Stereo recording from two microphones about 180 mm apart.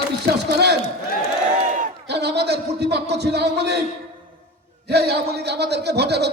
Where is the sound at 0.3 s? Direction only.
70° right (ahead or behind).